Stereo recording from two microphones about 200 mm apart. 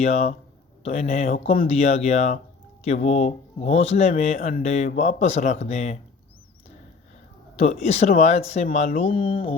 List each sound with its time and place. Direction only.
0.0 s speech: 35° left (ahead or behind)
7.5 s speech: 30° left (ahead or behind)